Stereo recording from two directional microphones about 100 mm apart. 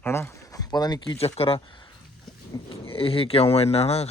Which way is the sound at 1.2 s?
85° left.